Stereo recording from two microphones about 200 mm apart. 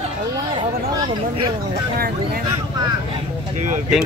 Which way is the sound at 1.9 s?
50° right (ahead or behind).